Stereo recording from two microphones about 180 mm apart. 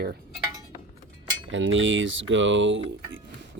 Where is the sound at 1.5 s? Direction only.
90° right.